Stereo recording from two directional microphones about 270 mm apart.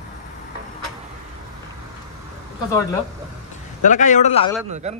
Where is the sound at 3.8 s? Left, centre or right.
Left.